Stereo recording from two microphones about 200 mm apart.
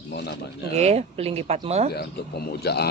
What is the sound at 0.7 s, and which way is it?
Speech, 30° right (ahead or behind).